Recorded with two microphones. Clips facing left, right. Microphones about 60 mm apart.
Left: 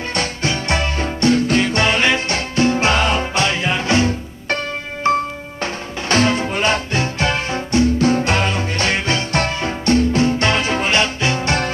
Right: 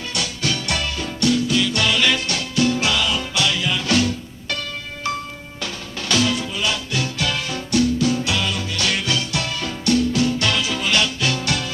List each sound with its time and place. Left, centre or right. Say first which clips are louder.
0.1 s music: left 3 dB; left